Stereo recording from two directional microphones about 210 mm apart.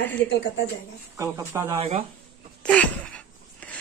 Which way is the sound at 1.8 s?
25° right (ahead or behind).